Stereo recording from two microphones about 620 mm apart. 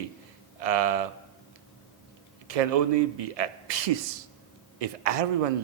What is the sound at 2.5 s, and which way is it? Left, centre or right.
A man's voice, right.